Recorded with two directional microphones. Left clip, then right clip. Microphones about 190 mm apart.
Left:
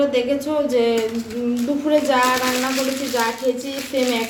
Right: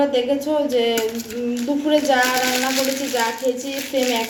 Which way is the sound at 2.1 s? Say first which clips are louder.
Even; 15° left (ahead or behind).